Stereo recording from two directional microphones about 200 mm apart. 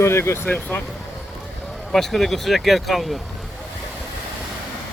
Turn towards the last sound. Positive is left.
turn(degrees=0)  # may be behind; listen again after turning